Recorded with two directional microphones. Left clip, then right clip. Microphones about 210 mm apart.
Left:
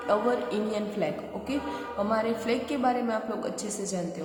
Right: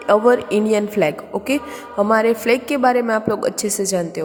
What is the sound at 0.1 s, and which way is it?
A woman's voice, 45° right (ahead or behind).